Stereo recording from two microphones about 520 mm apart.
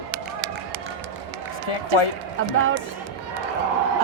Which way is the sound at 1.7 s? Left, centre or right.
Left.